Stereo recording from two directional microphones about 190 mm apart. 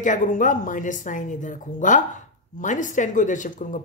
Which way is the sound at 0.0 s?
40° left (ahead or behind).